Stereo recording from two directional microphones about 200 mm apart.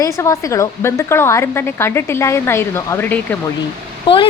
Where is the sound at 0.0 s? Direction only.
15° left (ahead or behind).